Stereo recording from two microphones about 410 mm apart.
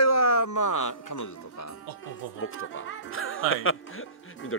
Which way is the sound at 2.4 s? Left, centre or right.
Left.